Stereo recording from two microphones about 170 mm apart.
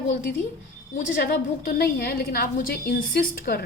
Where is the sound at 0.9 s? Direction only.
55° left (ahead or behind).